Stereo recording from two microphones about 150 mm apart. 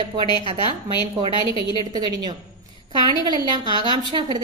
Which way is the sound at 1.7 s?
30° right (ahead or behind).